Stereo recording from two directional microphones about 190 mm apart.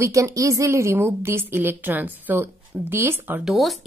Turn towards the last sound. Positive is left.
turn(degrees=0)  # may be behind; listen again after turning